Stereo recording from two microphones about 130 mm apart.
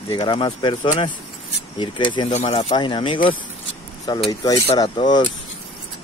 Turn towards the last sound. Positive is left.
turn(degrees=35)  # may be behind; listen again after turning